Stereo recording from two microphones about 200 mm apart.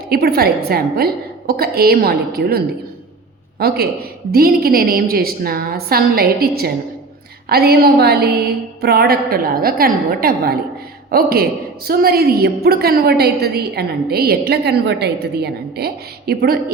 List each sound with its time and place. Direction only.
0.1 s a woman's voice: 50° right (ahead or behind)